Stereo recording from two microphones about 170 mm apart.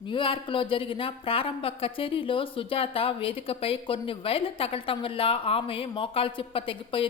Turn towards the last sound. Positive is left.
turn(degrees=30)  # may be behind; listen again after turning